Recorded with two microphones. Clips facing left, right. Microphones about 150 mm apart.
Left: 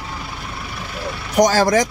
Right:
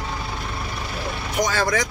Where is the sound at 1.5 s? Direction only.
35° left (ahead or behind).